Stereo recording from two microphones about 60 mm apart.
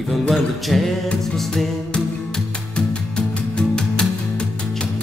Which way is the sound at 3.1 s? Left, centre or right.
Centre.